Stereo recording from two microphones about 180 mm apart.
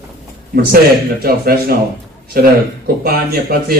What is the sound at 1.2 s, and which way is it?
Speech, 60° right (ahead or behind).